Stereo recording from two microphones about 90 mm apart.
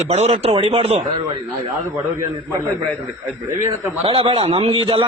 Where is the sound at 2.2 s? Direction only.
35° right (ahead or behind).